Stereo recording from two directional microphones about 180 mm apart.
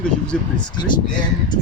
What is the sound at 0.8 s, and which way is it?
Speech, 25° left (ahead or behind).